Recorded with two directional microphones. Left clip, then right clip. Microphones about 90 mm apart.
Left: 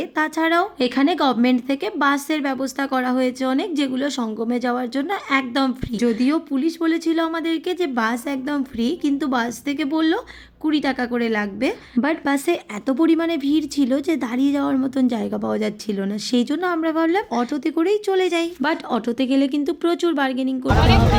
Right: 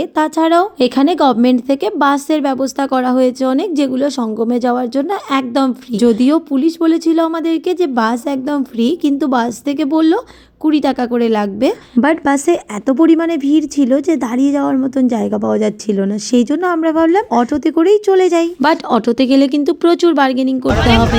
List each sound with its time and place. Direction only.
0.2 s speech: 35° right (ahead or behind)
6.0 s a woman's voice: 40° right (ahead or behind)
12.9 s speech: 15° right (ahead or behind)
17.3 s a woman's voice: 35° right (ahead or behind)
18.6 s speech: 25° right (ahead or behind)